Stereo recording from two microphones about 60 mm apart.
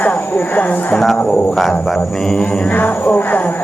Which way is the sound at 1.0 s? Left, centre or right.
Centre.